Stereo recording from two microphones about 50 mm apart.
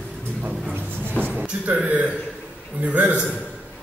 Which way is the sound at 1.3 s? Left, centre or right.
Right.